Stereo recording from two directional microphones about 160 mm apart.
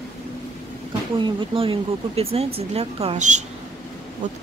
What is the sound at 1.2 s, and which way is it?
Speech, 35° right (ahead or behind).